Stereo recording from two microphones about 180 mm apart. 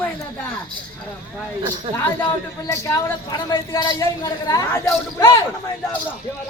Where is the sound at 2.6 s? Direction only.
15° left (ahead or behind).